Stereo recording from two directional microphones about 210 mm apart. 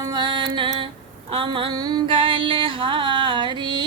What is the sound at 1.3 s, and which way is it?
Female singing, 25° right (ahead or behind).